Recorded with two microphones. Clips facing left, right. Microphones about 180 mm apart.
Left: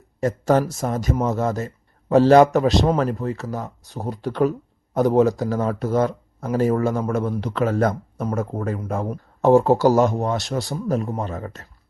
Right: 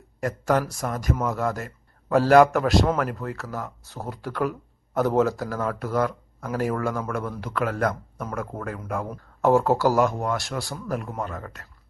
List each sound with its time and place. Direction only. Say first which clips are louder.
0.2 s speech: left 5 dB; 25° left (ahead or behind)